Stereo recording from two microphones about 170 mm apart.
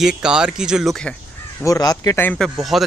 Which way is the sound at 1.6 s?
20° left (ahead or behind).